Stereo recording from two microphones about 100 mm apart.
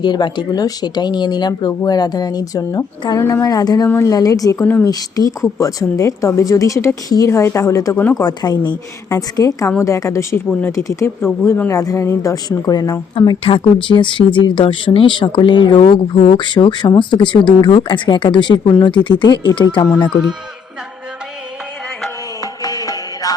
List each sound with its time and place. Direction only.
0.0 s speech: 50° left (ahead or behind)
4.6 s speech: 20° left (ahead or behind)
4.9 s speech: 40° left (ahead or behind)
8.2 s speech: 45° left (ahead or behind)
9.0 s speech: 35° left (ahead or behind)
13.8 s speech: 55° left (ahead or behind)
15.8 s speech: 85° left
16.4 s speech: 50° left (ahead or behind)
22.4 s music: 40° left (ahead or behind)